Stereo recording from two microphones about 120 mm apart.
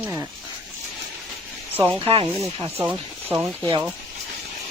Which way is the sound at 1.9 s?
50° right (ahead or behind).